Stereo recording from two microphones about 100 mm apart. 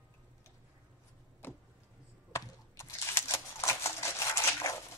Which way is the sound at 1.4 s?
20° left (ahead or behind).